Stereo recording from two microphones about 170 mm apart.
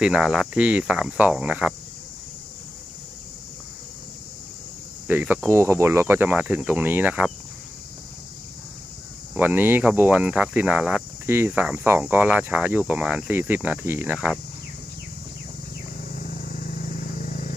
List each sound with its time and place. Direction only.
0.0 s cricket: 5° right (ahead or behind)
5.0 s speech: 10° right (ahead or behind)
9.3 s speech: 10° right (ahead or behind)
16.2 s vehicle: 55° left (ahead or behind)